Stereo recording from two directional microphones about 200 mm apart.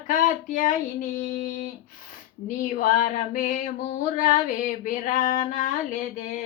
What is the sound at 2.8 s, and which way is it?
Female singing, 40° left (ahead or behind).